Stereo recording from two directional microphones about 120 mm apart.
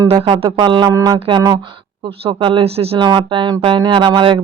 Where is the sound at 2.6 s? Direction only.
55° right (ahead or behind).